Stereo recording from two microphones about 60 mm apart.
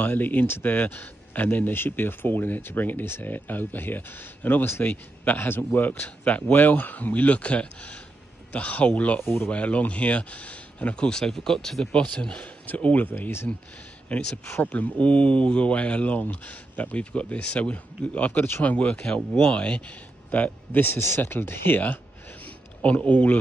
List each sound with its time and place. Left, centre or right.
0.0 s a man's voice: left
11.1 s speech: centre
12.6 s a man's voice: left
22.8 s speech: left